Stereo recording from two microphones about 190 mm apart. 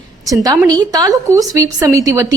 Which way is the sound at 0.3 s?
20° right (ahead or behind).